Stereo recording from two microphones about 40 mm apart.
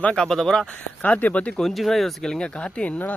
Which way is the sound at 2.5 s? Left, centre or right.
Left.